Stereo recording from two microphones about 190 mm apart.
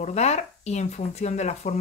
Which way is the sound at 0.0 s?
35° left (ahead or behind).